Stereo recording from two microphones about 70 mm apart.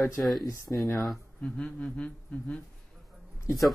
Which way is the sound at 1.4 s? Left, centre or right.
Centre.